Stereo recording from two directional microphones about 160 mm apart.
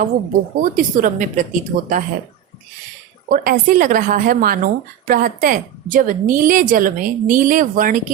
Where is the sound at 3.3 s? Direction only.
55° right (ahead or behind).